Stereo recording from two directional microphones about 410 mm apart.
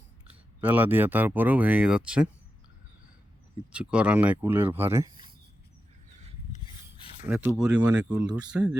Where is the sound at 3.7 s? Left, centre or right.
Centre.